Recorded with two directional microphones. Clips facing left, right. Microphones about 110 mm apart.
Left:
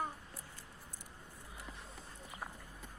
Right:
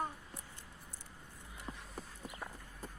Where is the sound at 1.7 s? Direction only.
30° right (ahead or behind).